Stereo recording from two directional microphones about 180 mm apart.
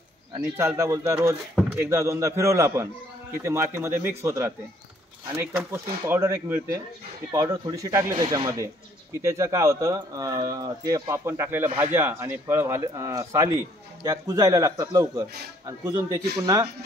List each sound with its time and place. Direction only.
0.6 s speech: 15° right (ahead or behind)